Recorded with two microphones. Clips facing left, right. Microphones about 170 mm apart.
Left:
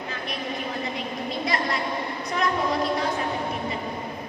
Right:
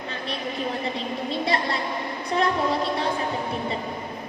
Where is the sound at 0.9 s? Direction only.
30° right (ahead or behind).